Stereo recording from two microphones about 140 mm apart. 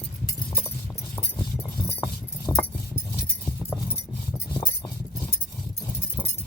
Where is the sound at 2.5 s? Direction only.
25° left (ahead or behind).